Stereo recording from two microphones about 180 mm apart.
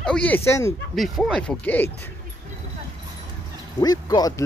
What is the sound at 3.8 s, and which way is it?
Speech, 20° left (ahead or behind).